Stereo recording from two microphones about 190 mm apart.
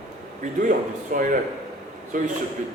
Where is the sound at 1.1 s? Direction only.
45° right (ahead or behind).